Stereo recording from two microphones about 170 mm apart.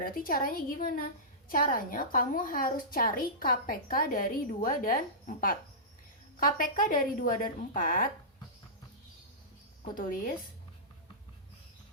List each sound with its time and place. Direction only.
0.0 s a woman's voice: 60° left (ahead or behind)